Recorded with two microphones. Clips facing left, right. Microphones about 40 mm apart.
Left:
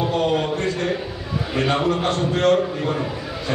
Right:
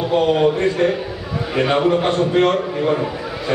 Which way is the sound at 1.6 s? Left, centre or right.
Centre.